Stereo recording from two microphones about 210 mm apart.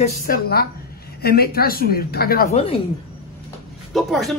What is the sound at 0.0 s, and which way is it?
Speech, 45° left (ahead or behind).